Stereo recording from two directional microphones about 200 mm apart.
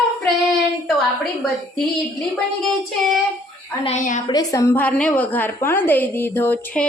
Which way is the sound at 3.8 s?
35° left (ahead or behind).